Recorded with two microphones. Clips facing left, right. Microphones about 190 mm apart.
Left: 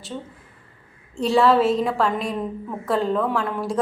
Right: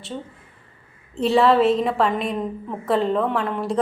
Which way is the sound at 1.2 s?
Centre (ahead or behind).